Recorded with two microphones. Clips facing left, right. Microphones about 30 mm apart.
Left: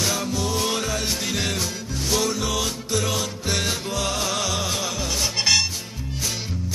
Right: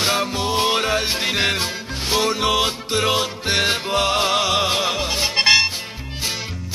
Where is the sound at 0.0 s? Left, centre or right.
Right.